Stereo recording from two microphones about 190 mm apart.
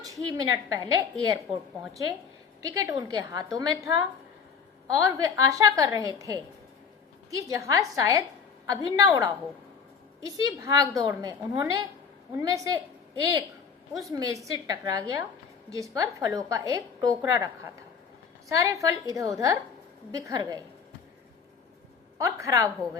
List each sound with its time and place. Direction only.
0.0 s a woman's voice: 20° right (ahead or behind)
14.0 s a woman's voice: 20° right (ahead or behind)
22.2 s a woman's voice: 15° right (ahead or behind)